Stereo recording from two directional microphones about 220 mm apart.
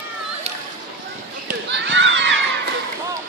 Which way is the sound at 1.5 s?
50° right (ahead or behind).